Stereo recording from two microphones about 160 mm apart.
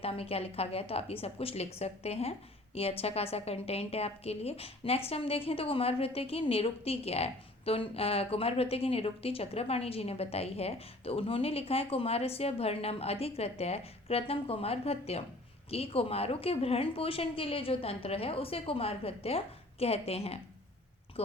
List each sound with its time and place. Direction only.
0.0 s a woman's voice: 35° left (ahead or behind)